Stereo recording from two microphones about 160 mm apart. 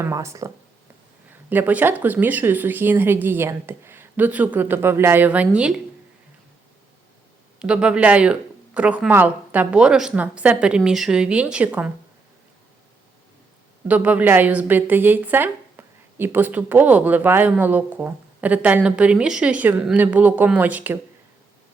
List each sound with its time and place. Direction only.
0.0 s a woman's voice: 20° right (ahead or behind)
7.6 s a woman's voice: 5° right (ahead or behind)
13.8 s a woman's voice: 10° right (ahead or behind)